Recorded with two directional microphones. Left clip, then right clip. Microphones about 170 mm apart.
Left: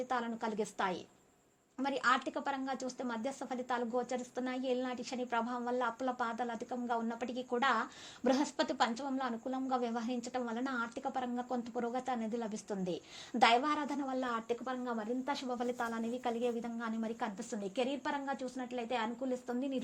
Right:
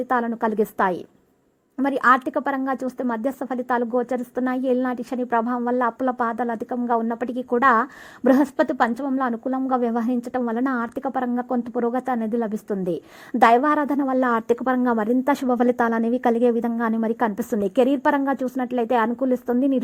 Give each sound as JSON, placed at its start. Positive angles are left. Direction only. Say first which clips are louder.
{"t": 0.1, "sound": "a woman's voice", "louder": "right 15 dB", "side_deg": -30}
{"t": 4.1, "sound": "a woman's voice", "louder": "right 14 dB", "side_deg": -25}
{"t": 4.5, "sound": "a woman's voice", "louder": "right 13 dB", "side_deg": -35}
{"t": 6.2, "sound": "a woman's voice", "louder": "right 14 dB", "side_deg": -30}
{"t": 8.5, "sound": "a woman's voice", "louder": "right 13 dB", "side_deg": -40}
{"t": 13.7, "sound": "a woman's voice", "louder": "right 15 dB", "side_deg": -25}
{"t": 13.9, "sound": "a woman's voice", "louder": "right 16 dB", "side_deg": -40}